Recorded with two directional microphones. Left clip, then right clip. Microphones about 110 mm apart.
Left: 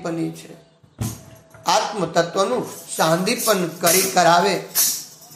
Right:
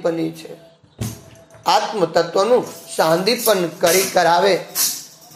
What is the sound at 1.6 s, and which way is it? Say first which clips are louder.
Speech: right 3 dB; 15° right (ahead or behind).